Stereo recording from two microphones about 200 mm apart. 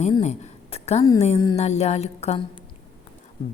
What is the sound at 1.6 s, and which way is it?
Speech, 35° left (ahead or behind).